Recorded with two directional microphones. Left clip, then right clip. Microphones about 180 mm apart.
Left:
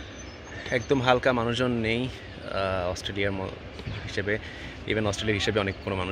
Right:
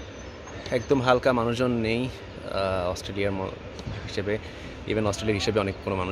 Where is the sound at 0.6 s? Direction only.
5° right (ahead or behind).